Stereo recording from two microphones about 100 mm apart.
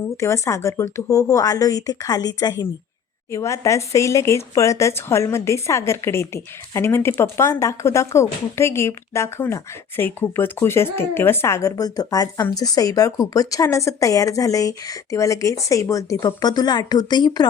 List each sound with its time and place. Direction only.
0.2 s speech: 30° left (ahead or behind)
3.3 s speech: 30° left (ahead or behind); by 17.4 s 45° left (ahead or behind)